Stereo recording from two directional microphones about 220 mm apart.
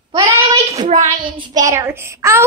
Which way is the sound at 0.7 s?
30° right (ahead or behind).